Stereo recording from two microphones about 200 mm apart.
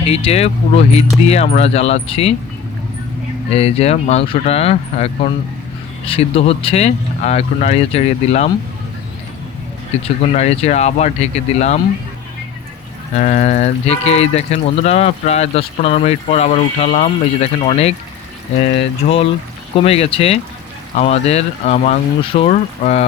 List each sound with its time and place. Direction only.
0.1 s speech: 30° left (ahead or behind)
3.5 s speech: 30° left (ahead or behind)
10.3 s speech: 35° left (ahead or behind)
13.1 s speech: 40° left (ahead or behind)